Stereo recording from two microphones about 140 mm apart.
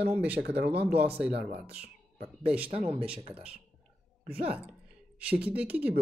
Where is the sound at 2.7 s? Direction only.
45° right (ahead or behind).